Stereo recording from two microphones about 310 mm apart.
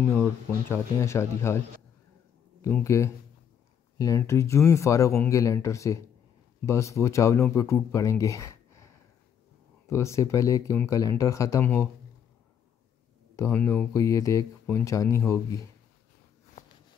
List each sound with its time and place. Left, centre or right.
0.7 s speech: centre
2.6 s speech: centre
13.4 s speech: centre
16.6 s a sound: left